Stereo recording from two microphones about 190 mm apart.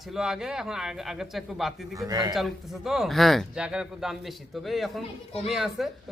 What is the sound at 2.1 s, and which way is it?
Speech, 20° right (ahead or behind).